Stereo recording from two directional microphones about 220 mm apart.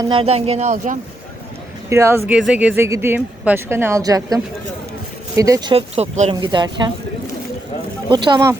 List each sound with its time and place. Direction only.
0.0 s speech: 25° right (ahead or behind)
1.9 s speech: 10° right (ahead or behind)
5.4 s speech: 15° right (ahead or behind)
8.1 s speech: 20° right (ahead or behind)